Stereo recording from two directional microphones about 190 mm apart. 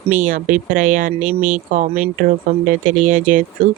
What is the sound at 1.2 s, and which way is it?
Speech, 10° right (ahead or behind).